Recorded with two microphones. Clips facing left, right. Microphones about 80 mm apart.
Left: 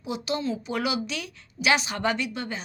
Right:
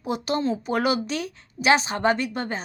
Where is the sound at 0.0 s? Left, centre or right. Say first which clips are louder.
Right 4 dB; right.